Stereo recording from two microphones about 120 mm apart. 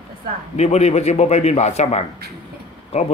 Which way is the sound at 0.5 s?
65° left (ahead or behind).